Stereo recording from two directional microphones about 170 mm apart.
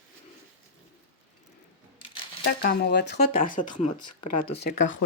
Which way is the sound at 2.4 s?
75° left (ahead or behind).